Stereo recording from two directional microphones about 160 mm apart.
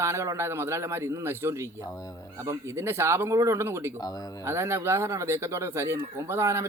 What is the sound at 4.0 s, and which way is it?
Speech, 25° left (ahead or behind).